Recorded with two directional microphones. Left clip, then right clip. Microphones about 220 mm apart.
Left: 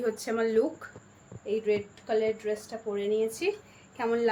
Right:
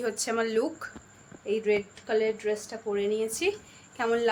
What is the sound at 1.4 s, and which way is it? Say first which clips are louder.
A woman's voice: right 2 dB; 20° right (ahead or behind).